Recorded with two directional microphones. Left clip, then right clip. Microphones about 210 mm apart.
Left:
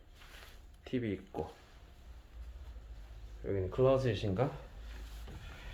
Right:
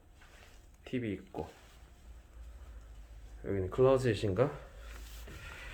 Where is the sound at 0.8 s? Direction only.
5° right (ahead or behind).